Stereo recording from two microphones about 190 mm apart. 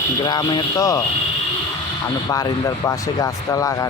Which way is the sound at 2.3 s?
20° left (ahead or behind).